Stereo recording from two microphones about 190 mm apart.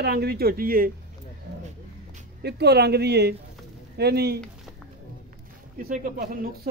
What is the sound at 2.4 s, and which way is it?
Speech, 60° right (ahead or behind).